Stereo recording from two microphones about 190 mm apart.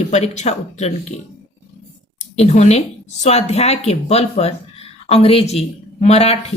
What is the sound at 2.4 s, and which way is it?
Speech, 35° left (ahead or behind).